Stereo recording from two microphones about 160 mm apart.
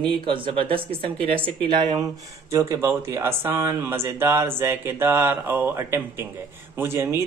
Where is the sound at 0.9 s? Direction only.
10° left (ahead or behind).